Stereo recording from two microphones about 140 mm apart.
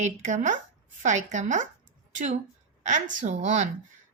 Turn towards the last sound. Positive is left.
turn(degrees=-60)  # may be behind; listen again after turning